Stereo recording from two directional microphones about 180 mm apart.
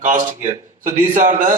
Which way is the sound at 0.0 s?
45° right (ahead or behind).